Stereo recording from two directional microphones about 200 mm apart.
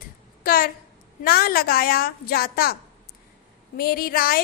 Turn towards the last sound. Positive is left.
turn(degrees=45)  # may be behind; listen again after turning